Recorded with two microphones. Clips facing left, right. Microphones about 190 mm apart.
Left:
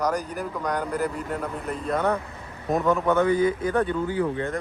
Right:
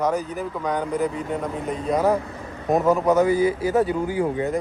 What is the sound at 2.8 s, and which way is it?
Speech, 35° right (ahead or behind).